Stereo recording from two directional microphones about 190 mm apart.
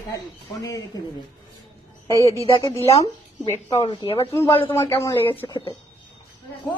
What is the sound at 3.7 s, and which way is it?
Speech, 30° left (ahead or behind).